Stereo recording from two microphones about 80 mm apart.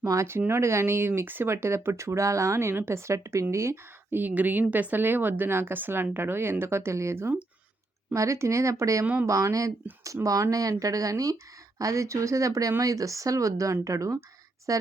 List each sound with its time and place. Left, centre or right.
0.0 s speech: right
4.2 s speech: right